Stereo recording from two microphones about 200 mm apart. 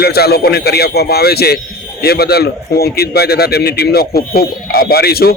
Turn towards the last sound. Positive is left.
turn(degrees=50)  # may be behind; listen again after turning